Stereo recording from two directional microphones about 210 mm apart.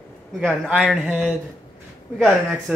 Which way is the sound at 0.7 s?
Centre (ahead or behind).